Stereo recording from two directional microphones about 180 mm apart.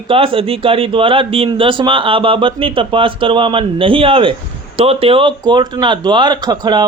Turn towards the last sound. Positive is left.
turn(degrees=-25)  # may be behind; listen again after turning